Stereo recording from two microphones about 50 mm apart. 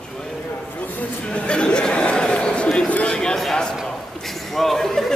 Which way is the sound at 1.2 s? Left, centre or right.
Left.